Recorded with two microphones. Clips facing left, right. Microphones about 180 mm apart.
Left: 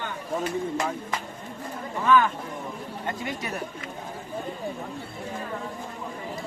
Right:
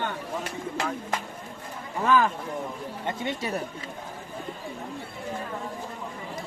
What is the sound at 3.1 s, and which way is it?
Speech, 25° right (ahead or behind).